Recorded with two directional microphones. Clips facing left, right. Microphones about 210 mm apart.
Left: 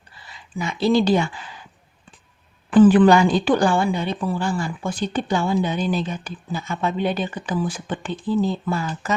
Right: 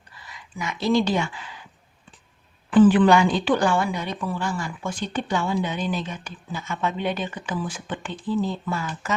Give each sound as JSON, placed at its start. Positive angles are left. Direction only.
{"t": 0.1, "sound": "speech", "side_deg": 30}
{"t": 2.6, "sound": "a woman's voice", "side_deg": 45}